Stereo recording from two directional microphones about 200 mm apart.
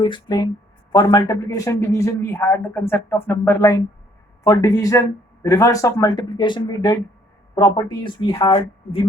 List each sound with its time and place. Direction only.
0.0 s a man's voice: 20° left (ahead or behind)